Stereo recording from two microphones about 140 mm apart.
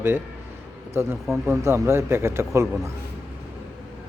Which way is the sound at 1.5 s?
20° right (ahead or behind).